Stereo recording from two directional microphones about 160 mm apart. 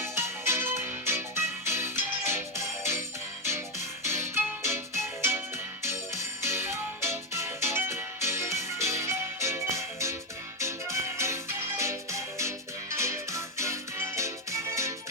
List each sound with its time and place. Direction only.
0.0 s music: 15° right (ahead or behind)
4.0 s music: 15° right (ahead or behind)
5.8 s music: 15° right (ahead or behind)